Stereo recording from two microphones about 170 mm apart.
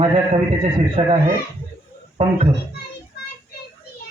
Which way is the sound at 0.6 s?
30° right (ahead or behind).